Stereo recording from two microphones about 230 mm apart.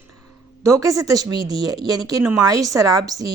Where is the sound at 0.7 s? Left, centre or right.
Centre.